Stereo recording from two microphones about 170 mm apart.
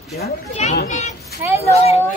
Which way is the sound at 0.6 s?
40° left (ahead or behind).